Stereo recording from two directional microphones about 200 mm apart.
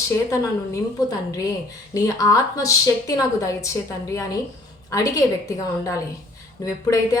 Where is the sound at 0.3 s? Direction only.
15° left (ahead or behind).